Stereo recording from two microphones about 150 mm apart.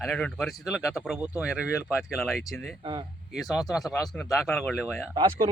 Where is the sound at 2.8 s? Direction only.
30° right (ahead or behind).